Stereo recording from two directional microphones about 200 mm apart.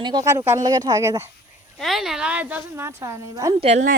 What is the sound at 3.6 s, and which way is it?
Speech, 35° right (ahead or behind).